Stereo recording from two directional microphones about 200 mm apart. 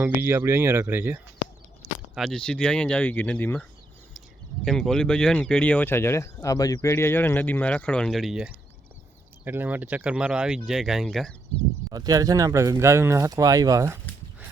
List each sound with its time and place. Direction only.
0.0 s speech: 10° right (ahead or behind)
1.8 s speech: centre (ahead or behind)
11.9 s speech: 20° right (ahead or behind)